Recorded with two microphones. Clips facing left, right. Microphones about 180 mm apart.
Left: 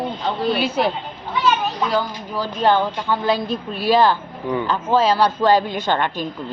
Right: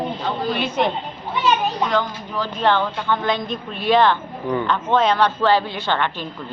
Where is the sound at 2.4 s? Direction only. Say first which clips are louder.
Left 2 dB; 40° left (ahead or behind).